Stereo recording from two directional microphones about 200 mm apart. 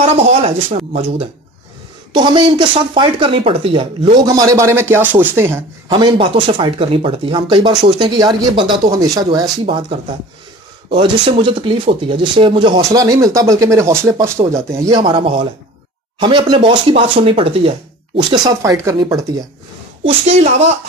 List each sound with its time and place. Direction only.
0.0 s speech: 30° right (ahead or behind); by 5.7 s 10° right (ahead or behind)
5.9 s speech: 25° right (ahead or behind)
20.0 s speech: 30° right (ahead or behind)